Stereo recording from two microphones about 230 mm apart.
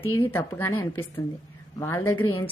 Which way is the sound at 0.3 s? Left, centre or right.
Centre.